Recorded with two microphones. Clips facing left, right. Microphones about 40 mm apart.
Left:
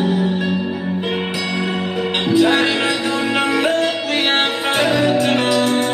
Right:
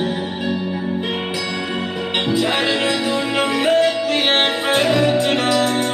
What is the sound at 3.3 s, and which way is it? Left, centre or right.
Music, centre.